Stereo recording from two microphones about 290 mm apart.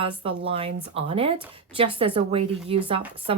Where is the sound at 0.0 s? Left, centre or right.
Centre.